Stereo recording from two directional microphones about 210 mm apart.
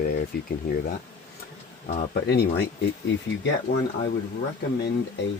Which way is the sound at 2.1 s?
50° left (ahead or behind).